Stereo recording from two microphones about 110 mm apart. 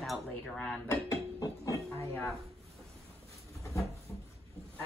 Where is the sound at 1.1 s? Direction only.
30° left (ahead or behind).